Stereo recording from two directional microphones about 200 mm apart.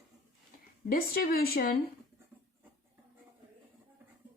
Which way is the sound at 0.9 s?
45° left (ahead or behind).